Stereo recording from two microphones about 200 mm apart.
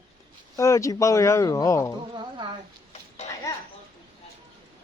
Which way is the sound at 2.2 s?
25° right (ahead or behind).